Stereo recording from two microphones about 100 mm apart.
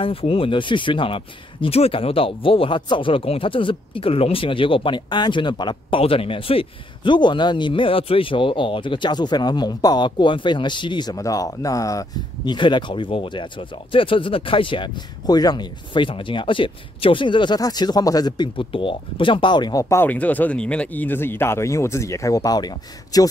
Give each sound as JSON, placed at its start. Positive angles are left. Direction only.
{"t": 0.0, "sound": "speech", "side_deg": 70}
{"t": 12.4, "sound": "speech", "side_deg": 55}
{"t": 17.6, "sound": "speech", "side_deg": 40}
{"t": 19.8, "sound": "speech", "side_deg": 30}
{"t": 20.1, "sound": "speech", "side_deg": 15}